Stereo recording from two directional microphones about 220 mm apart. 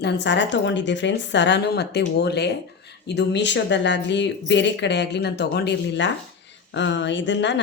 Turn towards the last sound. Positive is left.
turn(degrees=55)  # may be behind; listen again after turning